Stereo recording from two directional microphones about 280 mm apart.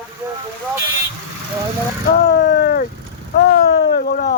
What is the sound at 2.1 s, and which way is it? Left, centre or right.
Vehicle, left.